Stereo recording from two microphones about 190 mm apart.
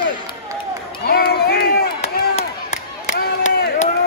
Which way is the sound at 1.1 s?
55° left (ahead or behind).